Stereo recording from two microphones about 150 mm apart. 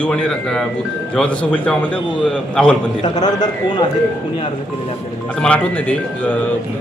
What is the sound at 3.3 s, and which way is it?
Speech, 25° left (ahead or behind).